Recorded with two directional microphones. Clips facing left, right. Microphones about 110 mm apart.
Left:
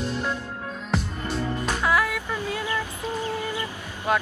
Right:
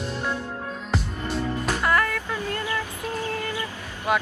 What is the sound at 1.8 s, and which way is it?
Music, 5° left (ahead or behind).